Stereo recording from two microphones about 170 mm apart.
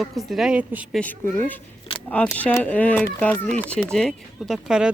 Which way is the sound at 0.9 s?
10° left (ahead or behind).